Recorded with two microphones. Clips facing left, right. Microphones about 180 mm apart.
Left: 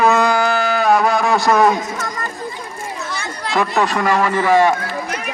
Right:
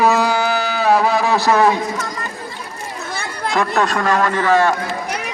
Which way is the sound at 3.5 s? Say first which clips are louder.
Left 1 dB; 5° left (ahead or behind).